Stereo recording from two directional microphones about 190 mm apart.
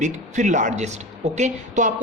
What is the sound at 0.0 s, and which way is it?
A man's voice, 40° right (ahead or behind).